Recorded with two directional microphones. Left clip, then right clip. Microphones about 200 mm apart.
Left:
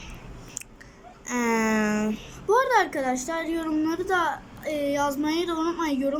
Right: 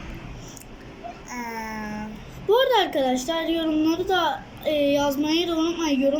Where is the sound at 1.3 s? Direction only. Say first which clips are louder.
Left 9 dB; 55° left (ahead or behind).